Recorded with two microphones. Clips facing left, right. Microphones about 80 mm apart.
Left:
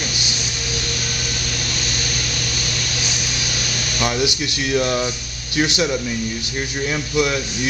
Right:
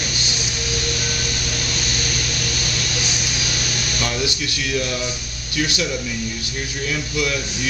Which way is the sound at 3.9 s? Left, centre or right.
Left.